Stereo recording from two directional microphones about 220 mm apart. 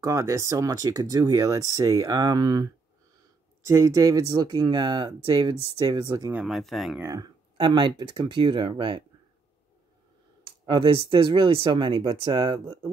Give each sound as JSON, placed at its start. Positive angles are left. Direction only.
{"t": 0.0, "sound": "speech", "side_deg": -15}
{"t": 6.4, "sound": "speech", "side_deg": 0}
{"t": 7.0, "sound": "speech", "side_deg": -15}
{"t": 10.6, "sound": "speech", "side_deg": -25}